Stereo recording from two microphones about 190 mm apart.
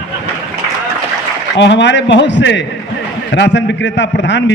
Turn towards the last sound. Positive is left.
turn(degrees=70)  # may be behind; listen again after turning